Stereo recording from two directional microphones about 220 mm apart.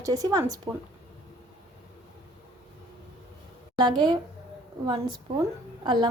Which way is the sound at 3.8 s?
20° right (ahead or behind).